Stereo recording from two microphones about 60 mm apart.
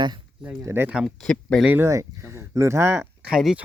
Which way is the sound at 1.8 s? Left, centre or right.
Right.